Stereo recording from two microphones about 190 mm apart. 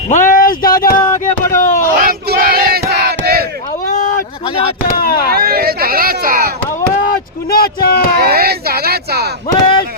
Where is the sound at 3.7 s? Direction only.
45° left (ahead or behind).